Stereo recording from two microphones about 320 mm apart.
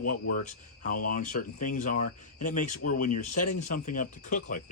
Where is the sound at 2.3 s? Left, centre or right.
Left.